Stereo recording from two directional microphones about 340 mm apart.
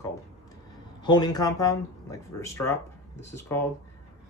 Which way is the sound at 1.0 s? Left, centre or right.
Centre.